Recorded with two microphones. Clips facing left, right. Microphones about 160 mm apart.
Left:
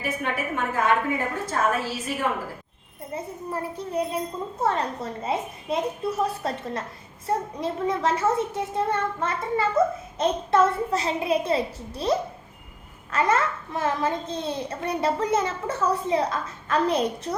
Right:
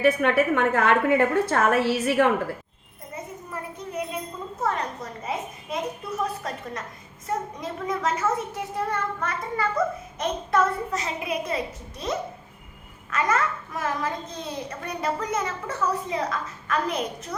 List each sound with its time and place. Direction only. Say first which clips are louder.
0.0 s a woman's voice: right 9 dB; 70° right (ahead or behind)
3.2 s a sound: left 4 dB; 30° left (ahead or behind)
4.6 s a child's voice: left 2 dB; 30° left (ahead or behind)